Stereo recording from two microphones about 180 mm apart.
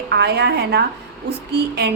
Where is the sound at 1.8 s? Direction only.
65° right (ahead or behind).